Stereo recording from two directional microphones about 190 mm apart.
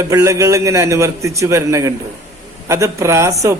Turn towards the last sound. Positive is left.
turn(degrees=-15)  # may be behind; listen again after turning